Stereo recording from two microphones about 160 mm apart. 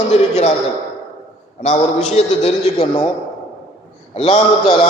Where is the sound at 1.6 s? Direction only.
45° left (ahead or behind).